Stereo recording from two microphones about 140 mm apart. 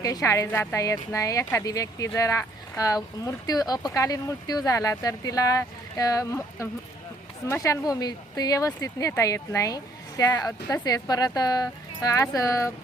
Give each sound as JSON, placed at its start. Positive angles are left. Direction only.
{"t": 0.0, "sound": "speech", "side_deg": 25}